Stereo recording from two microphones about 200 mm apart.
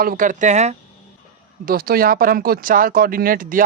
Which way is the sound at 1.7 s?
50° right (ahead or behind).